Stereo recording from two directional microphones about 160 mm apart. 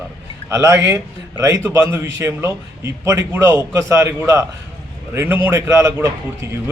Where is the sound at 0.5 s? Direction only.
20° right (ahead or behind).